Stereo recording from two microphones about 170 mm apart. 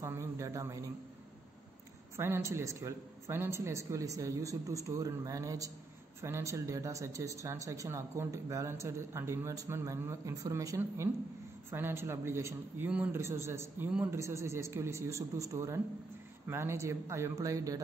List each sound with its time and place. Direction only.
0.0 s speech: 15° right (ahead or behind)
2.1 s a woman's voice: 15° right (ahead or behind)